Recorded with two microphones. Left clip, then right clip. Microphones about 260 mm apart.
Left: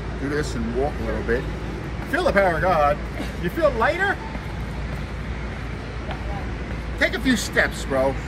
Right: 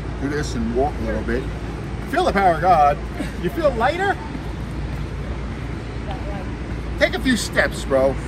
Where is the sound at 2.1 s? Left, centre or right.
Centre.